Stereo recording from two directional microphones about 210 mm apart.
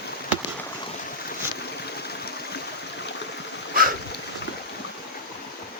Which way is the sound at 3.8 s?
45° right (ahead or behind).